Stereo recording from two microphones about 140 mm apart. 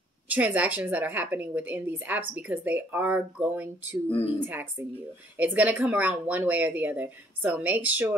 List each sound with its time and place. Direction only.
0.3 s a woman's voice: 10° right (ahead or behind)